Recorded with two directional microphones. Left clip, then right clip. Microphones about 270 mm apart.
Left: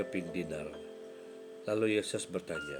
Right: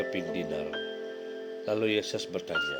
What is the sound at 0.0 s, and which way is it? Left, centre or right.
Speech, right.